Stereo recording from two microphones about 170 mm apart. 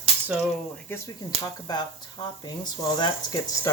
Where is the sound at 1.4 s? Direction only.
25° left (ahead or behind).